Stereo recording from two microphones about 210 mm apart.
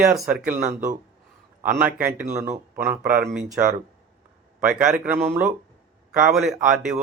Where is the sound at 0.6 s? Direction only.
35° right (ahead or behind).